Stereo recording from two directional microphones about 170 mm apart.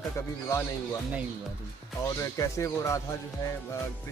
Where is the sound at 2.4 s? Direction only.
15° left (ahead or behind).